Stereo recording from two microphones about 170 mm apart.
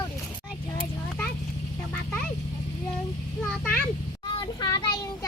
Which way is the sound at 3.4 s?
10° left (ahead or behind).